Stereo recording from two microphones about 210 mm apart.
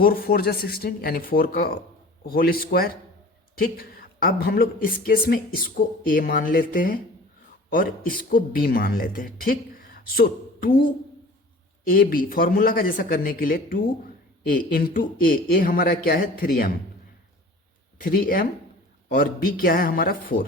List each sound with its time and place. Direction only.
0.0 s speech: 45° left (ahead or behind)
11.9 s speech: 45° left (ahead or behind)
18.0 s speech: 45° left (ahead or behind)